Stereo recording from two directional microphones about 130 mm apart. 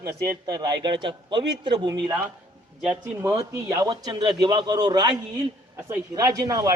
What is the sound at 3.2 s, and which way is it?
Speech, 20° right (ahead or behind).